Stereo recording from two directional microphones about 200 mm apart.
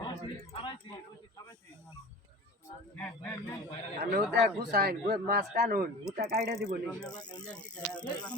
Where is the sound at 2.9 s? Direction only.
10° left (ahead or behind).